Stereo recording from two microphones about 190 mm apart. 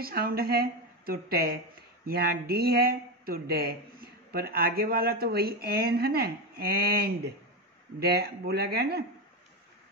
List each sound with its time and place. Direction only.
0.0 s speech: 50° right (ahead or behind)